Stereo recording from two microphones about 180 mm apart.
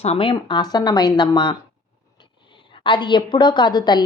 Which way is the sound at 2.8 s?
25° left (ahead or behind).